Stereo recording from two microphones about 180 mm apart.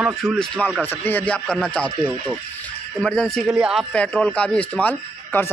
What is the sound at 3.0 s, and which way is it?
A man's voice, 5° left (ahead or behind).